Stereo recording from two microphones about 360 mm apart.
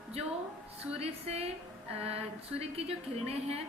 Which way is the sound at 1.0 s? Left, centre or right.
Centre.